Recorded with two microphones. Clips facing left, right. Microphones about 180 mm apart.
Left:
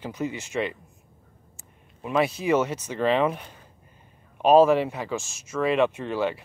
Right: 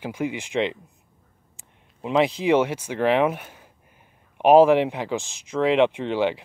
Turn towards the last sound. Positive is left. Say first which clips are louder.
# right 3 dB
turn(degrees=-15)  # may be behind; listen again after turning